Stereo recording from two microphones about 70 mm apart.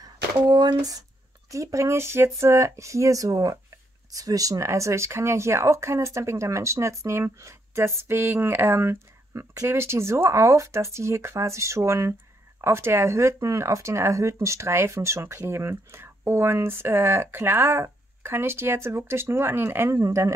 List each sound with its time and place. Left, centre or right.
0.5 s speech: right
1.5 s speech: right
19.9 s speech: right